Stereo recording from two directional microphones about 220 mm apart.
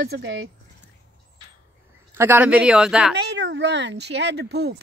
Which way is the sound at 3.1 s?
50° right (ahead or behind).